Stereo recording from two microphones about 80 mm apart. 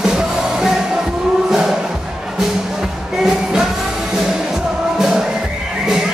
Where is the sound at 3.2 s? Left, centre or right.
Centre.